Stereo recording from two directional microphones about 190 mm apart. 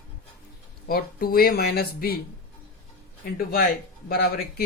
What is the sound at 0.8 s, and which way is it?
Speech, 50° left (ahead or behind).